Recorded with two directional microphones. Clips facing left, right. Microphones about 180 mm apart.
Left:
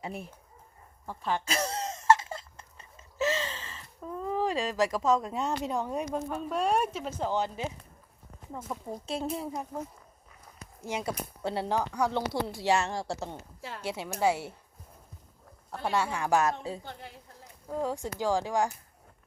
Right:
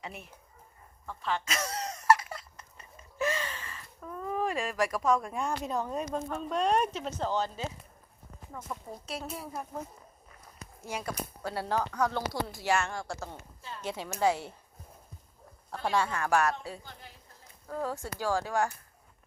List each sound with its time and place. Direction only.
0.0 s a woman's voice: 30° left (ahead or behind)
1.3 s a sound: 30° left (ahead or behind); by 7.1 s 5° left (ahead or behind)
7.2 s a woman's voice: 15° left (ahead or behind)
8.7 s speech: 20° left (ahead or behind)
10.8 s speech: 20° left (ahead or behind)
12.3 s a woman's voice: 30° left (ahead or behind)
13.6 s speech: 75° left (ahead or behind)
13.8 s a woman's voice: 10° left (ahead or behind)
15.7 s a woman's voice: 5° left (ahead or behind)